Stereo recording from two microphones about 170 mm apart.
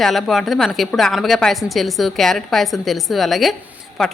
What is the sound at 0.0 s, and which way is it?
A woman's voice, centre (ahead or behind).